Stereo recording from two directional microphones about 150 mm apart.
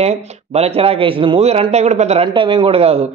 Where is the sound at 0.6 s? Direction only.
40° right (ahead or behind).